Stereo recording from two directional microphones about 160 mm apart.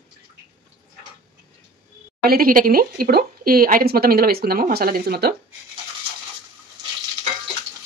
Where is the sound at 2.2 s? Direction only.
70° right (ahead or behind).